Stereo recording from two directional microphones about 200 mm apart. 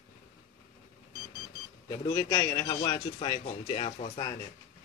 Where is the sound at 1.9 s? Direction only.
15° left (ahead or behind); by 4.2 s 35° left (ahead or behind).